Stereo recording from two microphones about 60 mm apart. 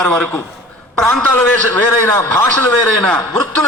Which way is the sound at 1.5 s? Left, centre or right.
Left.